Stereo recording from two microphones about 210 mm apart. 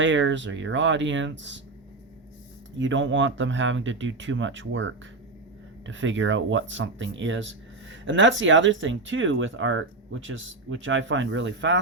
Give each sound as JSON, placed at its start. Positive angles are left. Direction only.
{"t": 0.0, "sound": "speech", "side_deg": -60}
{"t": 2.7, "sound": "speech", "side_deg": -65}